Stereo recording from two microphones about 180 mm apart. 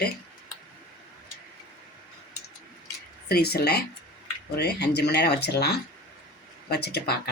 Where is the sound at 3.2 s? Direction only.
60° left (ahead or behind).